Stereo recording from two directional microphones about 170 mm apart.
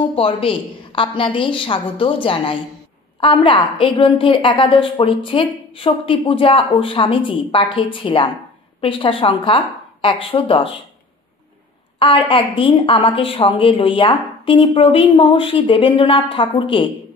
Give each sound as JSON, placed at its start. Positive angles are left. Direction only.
{"t": 0.1, "sound": "a woman's voice", "side_deg": 30}
{"t": 12.0, "sound": "a woman's voice", "side_deg": 30}